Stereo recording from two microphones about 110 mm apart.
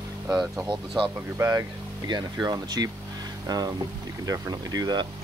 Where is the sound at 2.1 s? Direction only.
40° right (ahead or behind).